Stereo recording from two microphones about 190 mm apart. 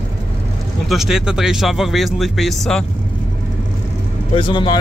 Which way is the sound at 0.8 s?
Centre (ahead or behind).